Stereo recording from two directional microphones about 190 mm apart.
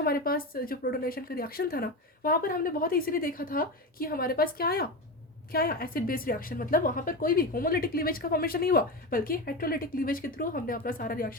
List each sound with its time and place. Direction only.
0.0 s a woman's voice: 50° left (ahead or behind)